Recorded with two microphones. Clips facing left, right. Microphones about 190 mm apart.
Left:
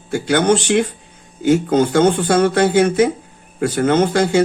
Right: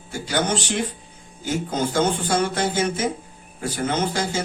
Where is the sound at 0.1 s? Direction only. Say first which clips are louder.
Left 9 dB; 65° left (ahead or behind).